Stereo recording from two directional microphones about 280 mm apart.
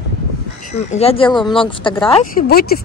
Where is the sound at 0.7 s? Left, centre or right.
Left.